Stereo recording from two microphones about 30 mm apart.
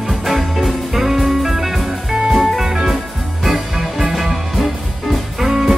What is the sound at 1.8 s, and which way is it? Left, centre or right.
Music, centre.